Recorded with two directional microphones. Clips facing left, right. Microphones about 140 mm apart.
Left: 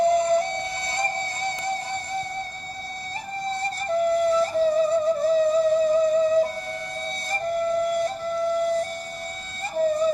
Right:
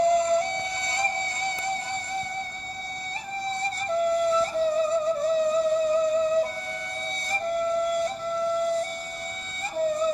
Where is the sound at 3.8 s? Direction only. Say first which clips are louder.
Left 2 dB; 45° left (ahead or behind).